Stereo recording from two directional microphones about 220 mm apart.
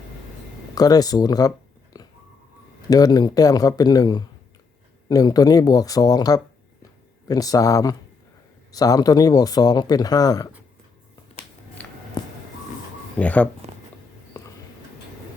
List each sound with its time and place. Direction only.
0.8 s speech: 15° left (ahead or behind)
12.2 s a sound: 20° left (ahead or behind)
13.1 s speech: 5° left (ahead or behind)